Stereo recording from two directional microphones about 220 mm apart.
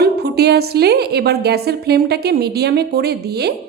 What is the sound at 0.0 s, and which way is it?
A woman's voice, 45° right (ahead or behind).